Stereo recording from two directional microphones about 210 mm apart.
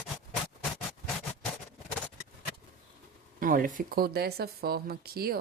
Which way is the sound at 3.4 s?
40° right (ahead or behind).